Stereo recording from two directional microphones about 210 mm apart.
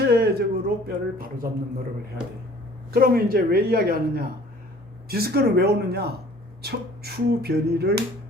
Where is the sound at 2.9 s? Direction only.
45° right (ahead or behind).